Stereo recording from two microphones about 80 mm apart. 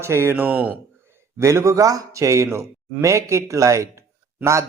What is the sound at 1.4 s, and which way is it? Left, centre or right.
A man's voice, right.